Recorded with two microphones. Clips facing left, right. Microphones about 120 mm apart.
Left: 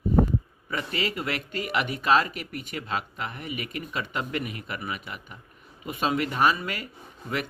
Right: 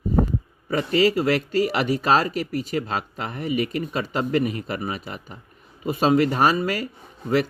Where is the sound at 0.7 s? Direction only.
35° right (ahead or behind).